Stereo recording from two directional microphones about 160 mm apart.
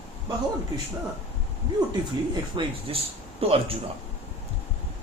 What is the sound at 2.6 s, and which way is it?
Speech, 30° right (ahead or behind).